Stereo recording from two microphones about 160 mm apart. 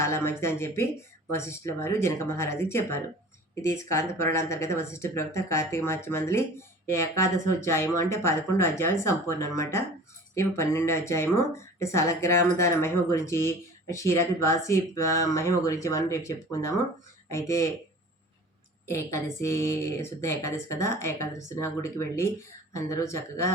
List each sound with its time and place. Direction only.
0.0 s speech: 15° left (ahead or behind)
18.9 s speech: 20° left (ahead or behind)